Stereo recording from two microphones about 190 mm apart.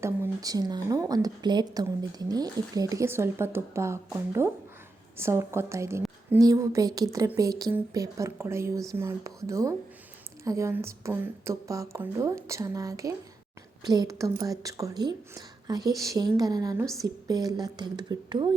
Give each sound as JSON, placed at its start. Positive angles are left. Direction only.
{"t": 0.0, "sound": "speech", "side_deg": -15}